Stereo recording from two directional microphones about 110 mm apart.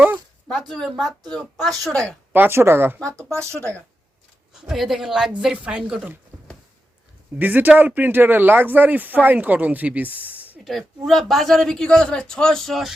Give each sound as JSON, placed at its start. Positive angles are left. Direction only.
{"t": 0.7, "sound": "a man's voice", "side_deg": 0}
{"t": 2.3, "sound": "speech", "side_deg": -20}
{"t": 4.6, "sound": "a man's voice", "side_deg": -5}
{"t": 7.3, "sound": "speech", "side_deg": -15}
{"t": 10.6, "sound": "a man's voice", "side_deg": 0}